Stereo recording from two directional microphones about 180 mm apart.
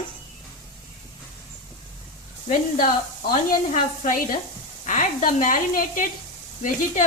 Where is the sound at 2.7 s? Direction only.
50° left (ahead or behind).